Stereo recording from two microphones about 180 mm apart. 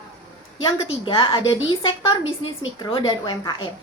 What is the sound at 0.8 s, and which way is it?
Speech, 30° left (ahead or behind).